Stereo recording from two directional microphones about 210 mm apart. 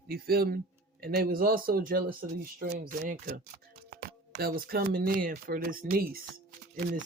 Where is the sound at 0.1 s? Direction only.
45° right (ahead or behind).